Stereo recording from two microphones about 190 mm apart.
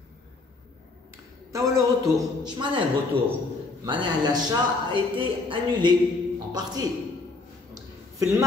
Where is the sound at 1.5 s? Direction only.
15° right (ahead or behind).